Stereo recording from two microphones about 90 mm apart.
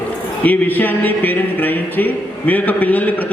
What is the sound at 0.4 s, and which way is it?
A man's voice, 20° left (ahead or behind).